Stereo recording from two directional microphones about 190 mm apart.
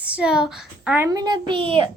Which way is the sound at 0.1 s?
5° right (ahead or behind).